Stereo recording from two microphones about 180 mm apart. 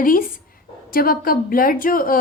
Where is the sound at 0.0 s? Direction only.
50° left (ahead or behind).